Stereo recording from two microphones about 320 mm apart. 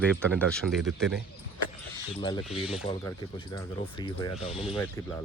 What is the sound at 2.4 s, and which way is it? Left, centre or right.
Speech, centre.